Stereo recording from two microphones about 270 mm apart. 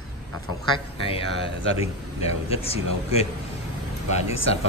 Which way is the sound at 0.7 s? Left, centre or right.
Centre.